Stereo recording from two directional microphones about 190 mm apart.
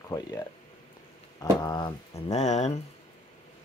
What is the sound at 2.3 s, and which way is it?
Speech, 35° left (ahead or behind).